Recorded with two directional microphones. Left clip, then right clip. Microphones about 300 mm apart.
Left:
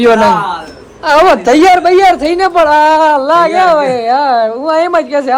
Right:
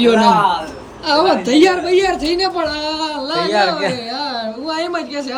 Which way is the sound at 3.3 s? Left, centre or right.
Centre.